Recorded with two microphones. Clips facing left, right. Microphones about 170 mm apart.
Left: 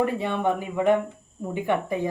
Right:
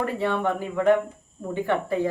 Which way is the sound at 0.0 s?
15° left (ahead or behind).